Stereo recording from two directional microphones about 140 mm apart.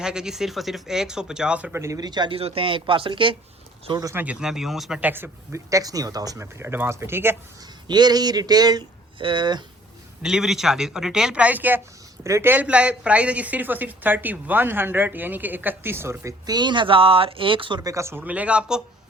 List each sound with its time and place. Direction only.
0.0 s speech: 5° right (ahead or behind); by 3.3 s 40° right (ahead or behind)
4.0 s speech: 15° right (ahead or behind)
7.9 s speech: 30° right (ahead or behind)
10.2 s speech: 5° right (ahead or behind)